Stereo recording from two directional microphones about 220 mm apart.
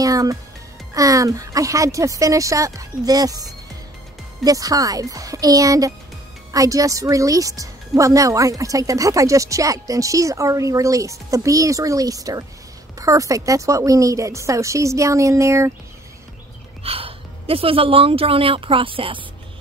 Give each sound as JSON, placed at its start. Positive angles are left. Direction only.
{"t": 0.0, "sound": "music", "side_deg": -15}
{"t": 0.9, "sound": "speech", "side_deg": -15}
{"t": 4.5, "sound": "speech", "side_deg": -15}
{"t": 16.8, "sound": "a woman's voice", "side_deg": -25}